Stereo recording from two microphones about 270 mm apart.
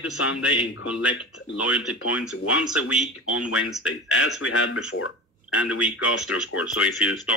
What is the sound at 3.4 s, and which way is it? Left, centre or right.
Speech, left.